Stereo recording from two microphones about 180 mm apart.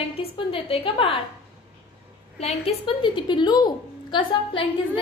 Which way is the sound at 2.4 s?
35° left (ahead or behind).